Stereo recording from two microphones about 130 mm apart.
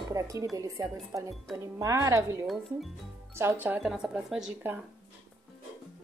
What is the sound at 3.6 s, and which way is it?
Speech, 15° right (ahead or behind).